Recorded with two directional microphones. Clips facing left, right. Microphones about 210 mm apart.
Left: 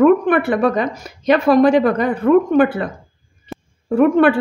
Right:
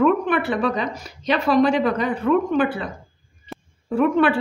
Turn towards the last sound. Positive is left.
turn(degrees=45)  # may be behind; listen again after turning